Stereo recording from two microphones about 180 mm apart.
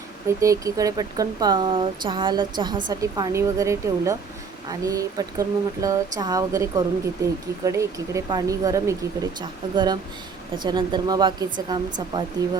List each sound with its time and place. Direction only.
0.3 s speech: 15° right (ahead or behind)